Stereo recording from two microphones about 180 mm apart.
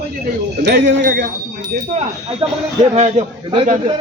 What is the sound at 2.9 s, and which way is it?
Speech, 35° right (ahead or behind).